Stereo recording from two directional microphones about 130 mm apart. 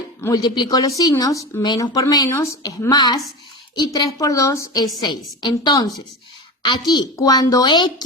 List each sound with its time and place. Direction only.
0.2 s a woman's voice: 25° left (ahead or behind)